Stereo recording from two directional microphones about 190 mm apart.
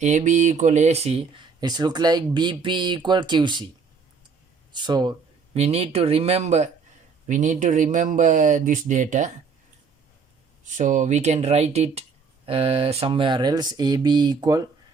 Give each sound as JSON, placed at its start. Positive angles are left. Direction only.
{"t": 0.0, "sound": "speech", "side_deg": -40}
{"t": 1.6, "sound": "speech", "side_deg": -20}
{"t": 4.7, "sound": "speech", "side_deg": -25}
{"t": 10.6, "sound": "speech", "side_deg": -40}